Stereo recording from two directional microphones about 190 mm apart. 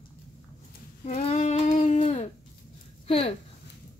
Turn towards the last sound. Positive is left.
turn(degrees=30)  # may be behind; listen again after turning